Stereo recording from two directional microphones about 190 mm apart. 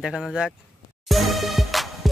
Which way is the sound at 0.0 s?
Centre (ahead or behind).